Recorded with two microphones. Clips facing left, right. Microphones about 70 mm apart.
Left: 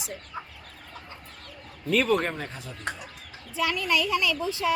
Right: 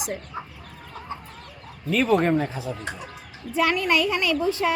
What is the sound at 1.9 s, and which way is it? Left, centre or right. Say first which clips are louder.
Speech: right 4 dB; centre.